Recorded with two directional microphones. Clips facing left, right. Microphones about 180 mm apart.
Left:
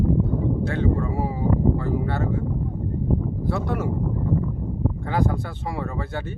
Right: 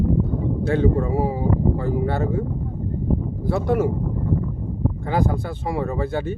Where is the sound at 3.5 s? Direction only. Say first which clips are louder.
Right 7 dB; 15° right (ahead or behind).